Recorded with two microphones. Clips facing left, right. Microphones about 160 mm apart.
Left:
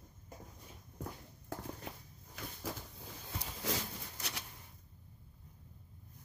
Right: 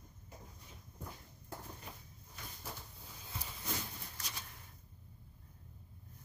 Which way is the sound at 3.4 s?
90° left.